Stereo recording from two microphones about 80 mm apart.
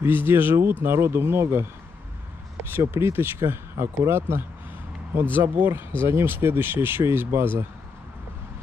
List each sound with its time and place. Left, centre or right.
0.0 s speech: right
2.7 s speech: right